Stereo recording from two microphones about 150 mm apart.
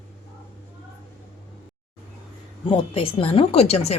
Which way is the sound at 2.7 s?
35° left (ahead or behind).